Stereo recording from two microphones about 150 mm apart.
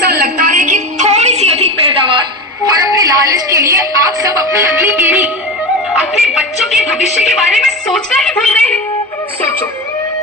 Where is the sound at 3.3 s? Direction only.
25° right (ahead or behind).